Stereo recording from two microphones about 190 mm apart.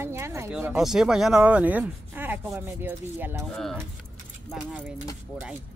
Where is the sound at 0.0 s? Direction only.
15° right (ahead or behind).